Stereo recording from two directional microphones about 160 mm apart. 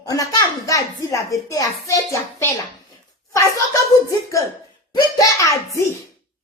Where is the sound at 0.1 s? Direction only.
20° left (ahead or behind).